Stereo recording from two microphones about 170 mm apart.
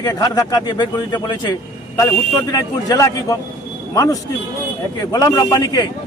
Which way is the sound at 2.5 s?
20° left (ahead or behind).